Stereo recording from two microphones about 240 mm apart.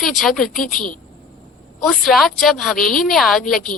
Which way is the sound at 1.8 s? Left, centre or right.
Centre.